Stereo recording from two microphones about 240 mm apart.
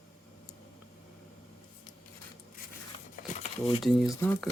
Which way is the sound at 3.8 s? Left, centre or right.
Centre.